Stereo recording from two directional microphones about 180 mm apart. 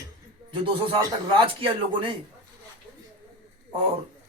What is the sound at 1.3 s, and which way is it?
Speech, 30° right (ahead or behind).